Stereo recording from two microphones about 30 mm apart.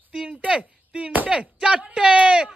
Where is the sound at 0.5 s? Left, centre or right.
Right.